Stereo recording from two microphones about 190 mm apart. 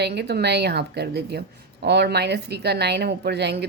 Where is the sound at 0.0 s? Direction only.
60° right (ahead or behind).